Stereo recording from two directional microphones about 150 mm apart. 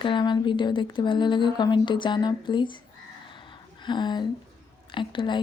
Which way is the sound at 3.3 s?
30° left (ahead or behind).